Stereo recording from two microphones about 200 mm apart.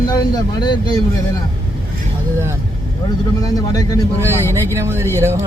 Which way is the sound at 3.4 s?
20° left (ahead or behind).